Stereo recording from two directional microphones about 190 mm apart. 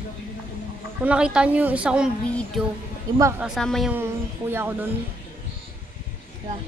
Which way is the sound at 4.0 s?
10° right (ahead or behind).